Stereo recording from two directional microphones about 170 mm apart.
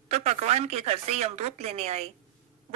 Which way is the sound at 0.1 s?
40° right (ahead or behind).